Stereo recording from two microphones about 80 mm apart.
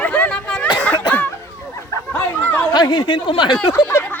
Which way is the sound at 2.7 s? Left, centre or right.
Left.